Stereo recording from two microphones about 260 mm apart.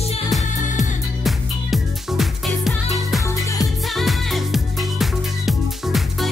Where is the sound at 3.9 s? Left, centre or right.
Centre.